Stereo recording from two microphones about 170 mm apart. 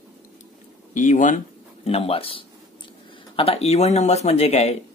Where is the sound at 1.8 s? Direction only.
35° left (ahead or behind).